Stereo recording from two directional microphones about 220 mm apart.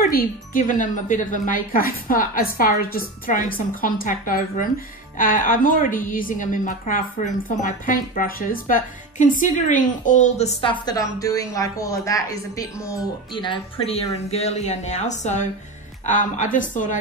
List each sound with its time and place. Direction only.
0.0 s a woman's voice: 40° left (ahead or behind)